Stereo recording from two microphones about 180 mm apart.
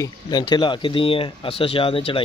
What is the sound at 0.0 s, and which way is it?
Speech, 25° left (ahead or behind).